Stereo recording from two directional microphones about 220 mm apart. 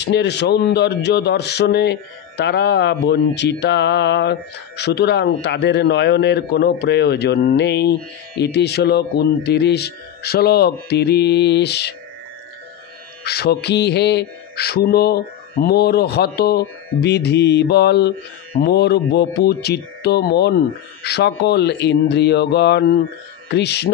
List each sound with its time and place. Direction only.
0.0 s a man's voice: 50° left (ahead or behind)
13.2 s a man's voice: 45° left (ahead or behind)